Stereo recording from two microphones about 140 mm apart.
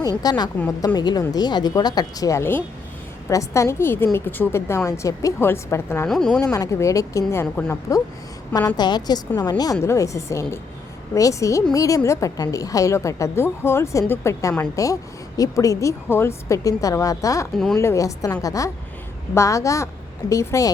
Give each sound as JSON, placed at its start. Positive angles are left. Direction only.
{"t": 0.2, "sound": "a woman's voice", "side_deg": 30}
{"t": 6.1, "sound": "speech", "side_deg": 5}
{"t": 6.5, "sound": "a woman's voice", "side_deg": 20}